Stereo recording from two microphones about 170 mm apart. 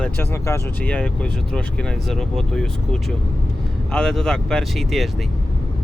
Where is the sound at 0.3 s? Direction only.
15° left (ahead or behind).